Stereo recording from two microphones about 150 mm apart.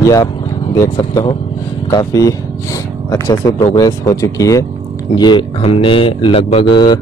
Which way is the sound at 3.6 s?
35° left (ahead or behind).